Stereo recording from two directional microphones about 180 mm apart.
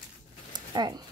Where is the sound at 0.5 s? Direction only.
25° right (ahead or behind).